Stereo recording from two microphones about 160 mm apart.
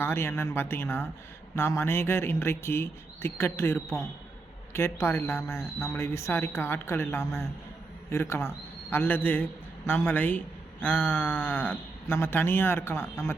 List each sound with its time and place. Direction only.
0.0 s speech: 15° left (ahead or behind)